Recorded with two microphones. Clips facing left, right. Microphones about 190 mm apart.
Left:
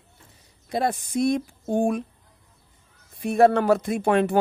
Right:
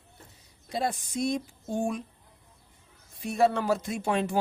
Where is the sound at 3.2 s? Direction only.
60° left (ahead or behind).